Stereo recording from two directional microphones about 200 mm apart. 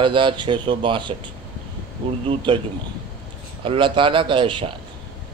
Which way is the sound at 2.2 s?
25° right (ahead or behind).